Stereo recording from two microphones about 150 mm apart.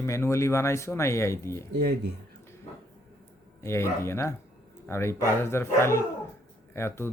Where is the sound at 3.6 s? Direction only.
15° left (ahead or behind).